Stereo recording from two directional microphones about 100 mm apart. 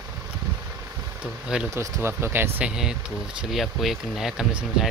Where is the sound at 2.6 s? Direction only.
5° right (ahead or behind).